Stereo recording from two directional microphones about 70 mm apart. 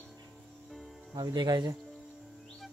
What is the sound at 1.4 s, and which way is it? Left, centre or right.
Speech, right.